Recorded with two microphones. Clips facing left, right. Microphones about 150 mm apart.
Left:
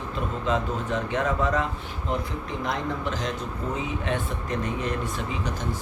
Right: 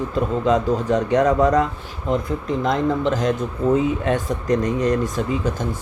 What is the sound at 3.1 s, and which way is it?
Speech, 45° right (ahead or behind).